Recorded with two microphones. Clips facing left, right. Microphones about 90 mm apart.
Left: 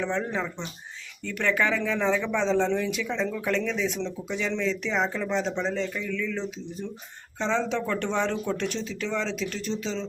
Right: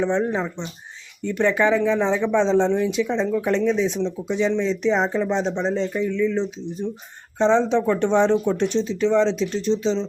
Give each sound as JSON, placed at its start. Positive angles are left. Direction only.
{"t": 0.0, "sound": "speech", "side_deg": -20}